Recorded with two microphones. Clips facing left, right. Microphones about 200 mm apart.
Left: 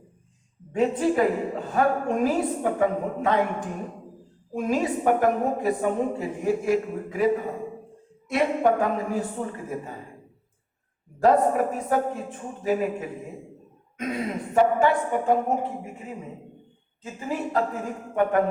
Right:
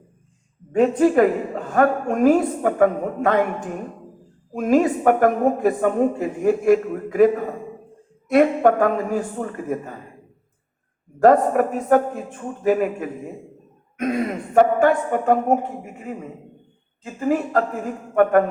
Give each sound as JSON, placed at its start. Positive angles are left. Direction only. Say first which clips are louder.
{"t": 0.7, "sound": "a woman's voice", "louder": "right 6 dB", "side_deg": -50}
{"t": 4.5, "sound": "a woman's voice", "louder": "right 7 dB", "side_deg": -55}
{"t": 11.2, "sound": "a woman's voice", "louder": "right 5 dB", "side_deg": -50}
{"t": 17.2, "sound": "a woman's voice", "louder": "right 6 dB", "side_deg": -50}